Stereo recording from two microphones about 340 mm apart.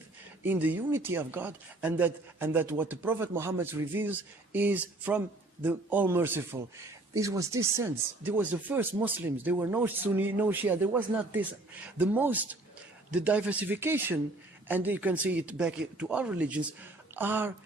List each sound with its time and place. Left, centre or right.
0.4 s speech: centre